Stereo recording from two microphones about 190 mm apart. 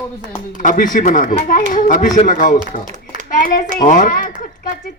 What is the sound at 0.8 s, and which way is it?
Speech, 45° left (ahead or behind).